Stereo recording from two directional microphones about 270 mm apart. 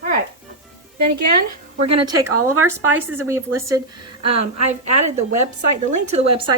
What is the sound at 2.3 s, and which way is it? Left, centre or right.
Speech, right.